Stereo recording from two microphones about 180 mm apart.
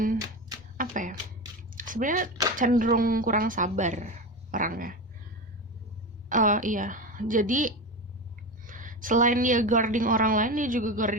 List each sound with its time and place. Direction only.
0.8 s a sound: 45° right (ahead or behind)
1.7 s chewing: 50° right (ahead or behind)
2.6 s a woman's voice: 50° right (ahead or behind)
6.2 s a woman's voice: 45° right (ahead or behind)